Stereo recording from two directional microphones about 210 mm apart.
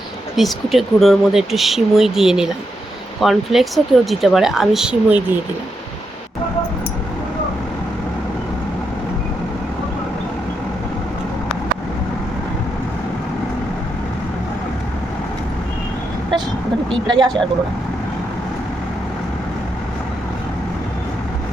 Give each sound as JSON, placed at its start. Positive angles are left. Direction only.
{"t": 0.3, "sound": "speech", "side_deg": 0}
{"t": 17.1, "sound": "speech", "side_deg": -20}